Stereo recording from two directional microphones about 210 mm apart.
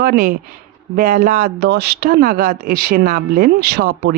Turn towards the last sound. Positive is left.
turn(degrees=-50)  # may be behind; listen again after turning